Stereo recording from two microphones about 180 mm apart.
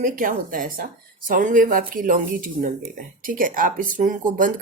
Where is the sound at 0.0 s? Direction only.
50° right (ahead or behind).